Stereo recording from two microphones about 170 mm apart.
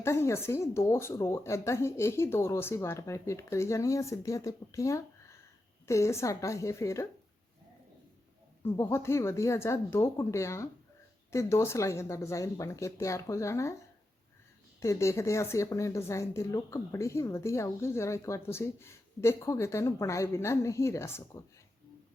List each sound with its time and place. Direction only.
0.0 s a woman's voice: 15° left (ahead or behind)
8.6 s a woman's voice: 15° left (ahead or behind)
14.8 s a woman's voice: 15° left (ahead or behind)